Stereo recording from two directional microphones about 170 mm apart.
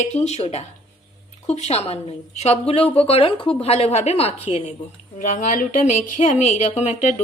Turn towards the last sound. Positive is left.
turn(degrees=40)  # may be behind; listen again after turning